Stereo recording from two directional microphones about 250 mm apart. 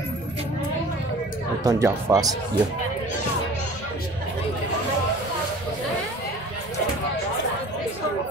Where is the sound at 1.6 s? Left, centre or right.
Centre.